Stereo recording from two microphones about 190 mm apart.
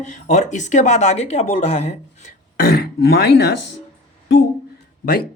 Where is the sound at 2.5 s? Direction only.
50° left (ahead or behind).